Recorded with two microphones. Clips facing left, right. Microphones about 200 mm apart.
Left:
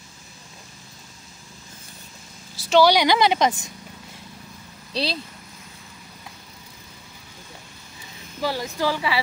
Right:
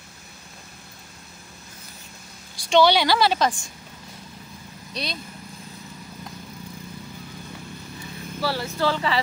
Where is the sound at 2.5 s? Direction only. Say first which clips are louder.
Left 1 dB; 5° left (ahead or behind).